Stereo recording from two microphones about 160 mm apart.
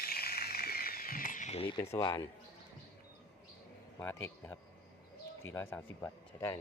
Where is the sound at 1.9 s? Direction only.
25° left (ahead or behind).